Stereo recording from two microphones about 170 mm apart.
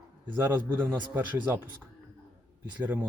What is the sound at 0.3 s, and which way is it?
Speech, 10° right (ahead or behind).